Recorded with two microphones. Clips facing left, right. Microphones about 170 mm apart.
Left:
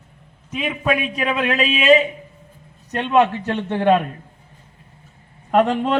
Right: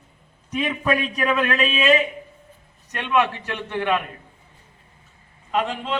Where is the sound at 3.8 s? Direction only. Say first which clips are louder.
Left 6 dB; 35° left (ahead or behind).